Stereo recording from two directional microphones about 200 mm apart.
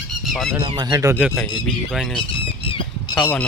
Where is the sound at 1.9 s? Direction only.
Centre (ahead or behind).